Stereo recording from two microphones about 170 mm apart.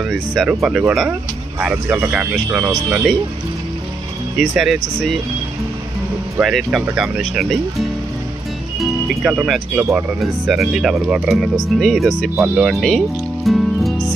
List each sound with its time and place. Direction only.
0.0 s speech: centre (ahead or behind)
4.4 s speech: centre (ahead or behind)
6.4 s speech: centre (ahead or behind)
8.8 s speech: 5° right (ahead or behind)